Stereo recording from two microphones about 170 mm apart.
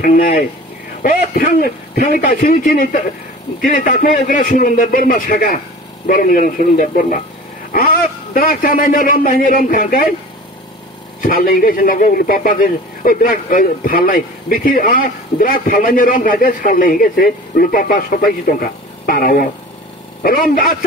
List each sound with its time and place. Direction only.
0.0 s a man's voice: 55° left (ahead or behind)
11.1 s a man's voice: 55° left (ahead or behind)